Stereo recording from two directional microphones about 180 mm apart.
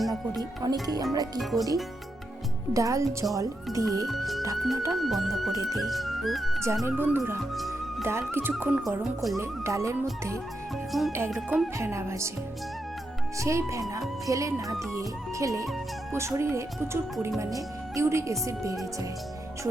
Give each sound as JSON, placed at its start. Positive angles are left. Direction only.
{"t": 0.6, "sound": "speech", "side_deg": -20}
{"t": 1.4, "sound": "speech", "side_deg": 0}
{"t": 2.7, "sound": "speech", "side_deg": -15}
{"t": 4.0, "sound": "speech", "side_deg": 0}
{"t": 6.8, "sound": "speech", "side_deg": -10}
{"t": 7.5, "sound": "music", "side_deg": 0}
{"t": 8.0, "sound": "speech", "side_deg": -15}
{"t": 9.4, "sound": "speech", "side_deg": -15}
{"t": 10.9, "sound": "speech", "side_deg": 0}
{"t": 11.8, "sound": "speech", "side_deg": -15}
{"t": 13.4, "sound": "speech", "side_deg": -15}